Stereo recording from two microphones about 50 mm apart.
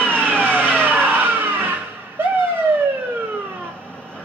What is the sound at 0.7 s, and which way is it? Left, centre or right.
Vehicle, right.